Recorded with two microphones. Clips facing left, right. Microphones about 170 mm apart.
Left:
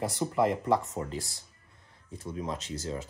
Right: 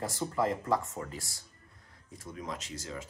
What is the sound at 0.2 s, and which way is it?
Speech, 15° left (ahead or behind).